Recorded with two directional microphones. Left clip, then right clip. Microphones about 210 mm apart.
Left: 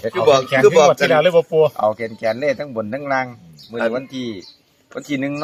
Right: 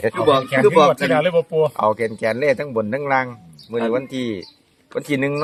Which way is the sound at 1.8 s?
40° right (ahead or behind).